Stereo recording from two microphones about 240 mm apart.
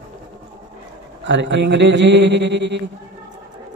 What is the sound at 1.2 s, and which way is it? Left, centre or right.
A man's voice, right.